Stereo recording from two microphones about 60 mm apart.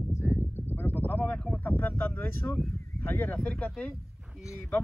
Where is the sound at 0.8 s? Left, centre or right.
Left.